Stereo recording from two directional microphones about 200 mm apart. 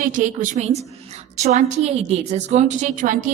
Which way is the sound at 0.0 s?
40° right (ahead or behind).